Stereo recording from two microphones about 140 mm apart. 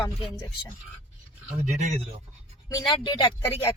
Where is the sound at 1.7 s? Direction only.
55° right (ahead or behind).